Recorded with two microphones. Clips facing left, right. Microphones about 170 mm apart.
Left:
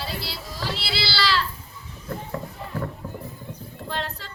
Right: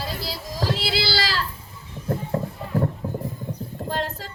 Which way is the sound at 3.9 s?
45° right (ahead or behind).